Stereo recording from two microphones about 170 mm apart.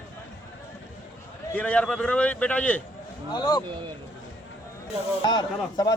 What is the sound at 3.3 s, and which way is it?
Speech, 25° left (ahead or behind).